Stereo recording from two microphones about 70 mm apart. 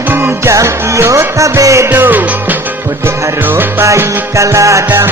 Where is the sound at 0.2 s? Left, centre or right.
Right.